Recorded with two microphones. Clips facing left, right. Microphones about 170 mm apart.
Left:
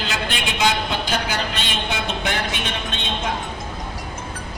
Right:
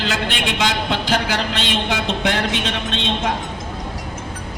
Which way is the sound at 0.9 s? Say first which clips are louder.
Right 4 dB; 90° right.